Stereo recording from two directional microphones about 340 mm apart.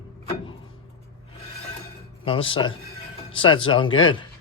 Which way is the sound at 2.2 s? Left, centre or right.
Centre.